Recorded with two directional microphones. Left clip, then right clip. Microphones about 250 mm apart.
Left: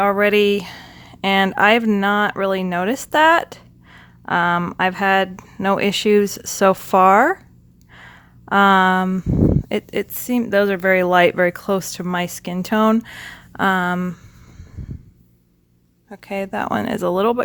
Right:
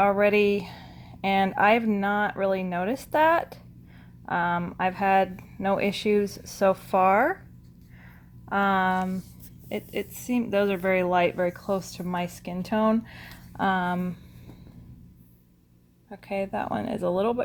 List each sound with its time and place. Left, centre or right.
0.0 s speech: left
7.9 s a sound: left
9.6 s speech: left
16.0 s speech: left